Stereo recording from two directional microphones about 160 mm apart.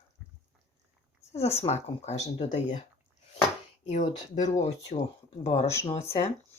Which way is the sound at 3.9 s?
50° left (ahead or behind).